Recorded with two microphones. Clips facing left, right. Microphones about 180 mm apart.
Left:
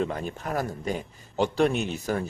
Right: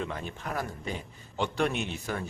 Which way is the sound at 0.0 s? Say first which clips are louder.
Left 6 dB; 40° left (ahead or behind).